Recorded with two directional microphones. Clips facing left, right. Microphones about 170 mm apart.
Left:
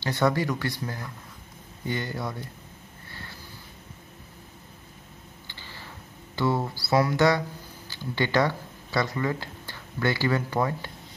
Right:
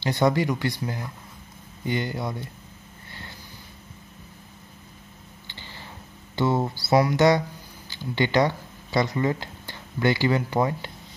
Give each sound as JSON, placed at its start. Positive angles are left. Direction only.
{"t": 0.0, "sound": "speech", "side_deg": -15}
{"t": 3.1, "sound": "sniff", "side_deg": -20}
{"t": 5.5, "sound": "tick", "side_deg": -25}
{"t": 6.3, "sound": "speech", "side_deg": -20}